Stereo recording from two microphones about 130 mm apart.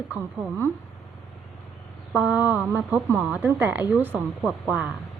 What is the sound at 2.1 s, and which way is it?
Mantra, 5° right (ahead or behind).